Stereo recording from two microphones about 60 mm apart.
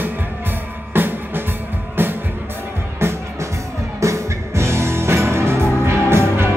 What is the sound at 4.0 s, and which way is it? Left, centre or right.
Music, right.